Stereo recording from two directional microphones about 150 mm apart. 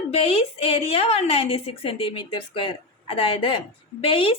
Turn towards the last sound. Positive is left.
turn(degrees=40)  # may be behind; listen again after turning